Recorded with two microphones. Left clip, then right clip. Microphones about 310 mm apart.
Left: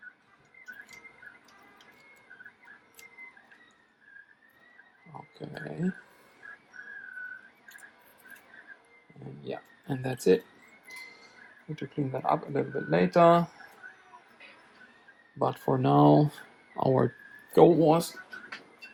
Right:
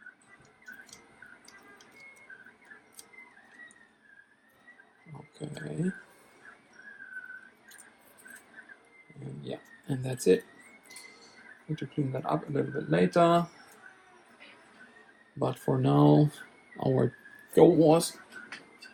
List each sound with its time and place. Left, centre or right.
5.4 s speech: left
9.4 s a sound: left
11.7 s speech: left
15.4 s speech: left